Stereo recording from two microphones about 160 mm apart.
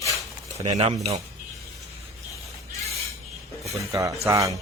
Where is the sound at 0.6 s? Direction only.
40° right (ahead or behind).